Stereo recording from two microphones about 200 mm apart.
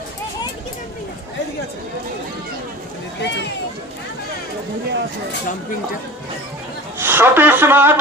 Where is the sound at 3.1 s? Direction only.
60° left (ahead or behind).